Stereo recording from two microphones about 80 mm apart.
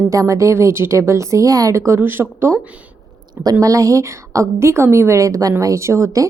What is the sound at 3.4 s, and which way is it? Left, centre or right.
A woman's voice, right.